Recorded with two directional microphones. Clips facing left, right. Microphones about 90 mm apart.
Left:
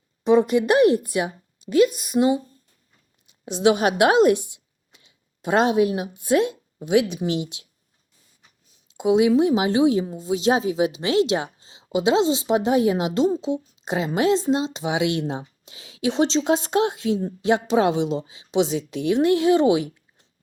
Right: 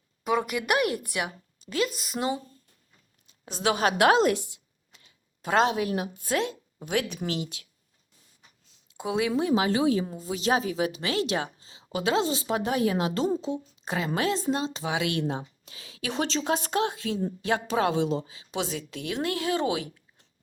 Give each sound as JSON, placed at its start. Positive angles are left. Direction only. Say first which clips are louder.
{"t": 0.3, "sound": "a woman's voice", "louder": "left 9 dB", "side_deg": 25}
{"t": 8.9, "sound": "a woman's voice", "louder": "left 10 dB", "side_deg": 20}